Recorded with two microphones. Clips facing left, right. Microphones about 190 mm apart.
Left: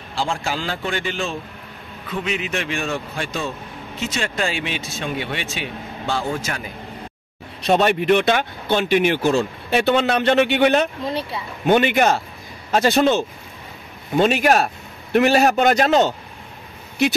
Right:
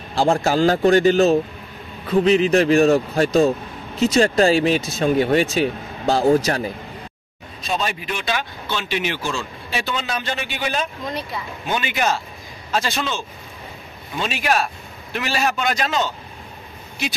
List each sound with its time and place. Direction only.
0.1 s speech: 40° right (ahead or behind)
7.6 s speech: 65° left (ahead or behind)
11.1 s speech: 30° left (ahead or behind)
11.6 s a man's voice: 60° left (ahead or behind)